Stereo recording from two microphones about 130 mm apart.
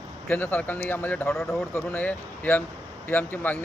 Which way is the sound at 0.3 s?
15° left (ahead or behind).